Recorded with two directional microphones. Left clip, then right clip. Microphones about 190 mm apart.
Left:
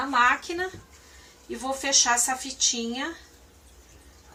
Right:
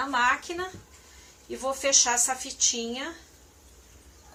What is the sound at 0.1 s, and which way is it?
Speech, 20° left (ahead or behind).